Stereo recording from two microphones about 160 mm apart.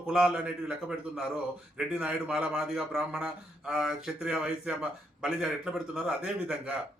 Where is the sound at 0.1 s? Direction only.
5° right (ahead or behind).